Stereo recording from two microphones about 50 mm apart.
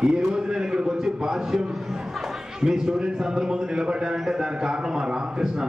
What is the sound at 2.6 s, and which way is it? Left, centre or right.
A man's voice, centre.